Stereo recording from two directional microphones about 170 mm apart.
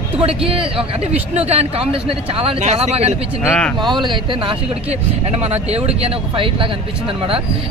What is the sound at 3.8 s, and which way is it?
Speech, 25° right (ahead or behind).